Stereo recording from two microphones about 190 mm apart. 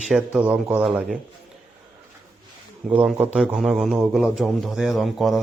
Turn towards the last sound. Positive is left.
turn(degrees=0)  # may be behind; listen again after turning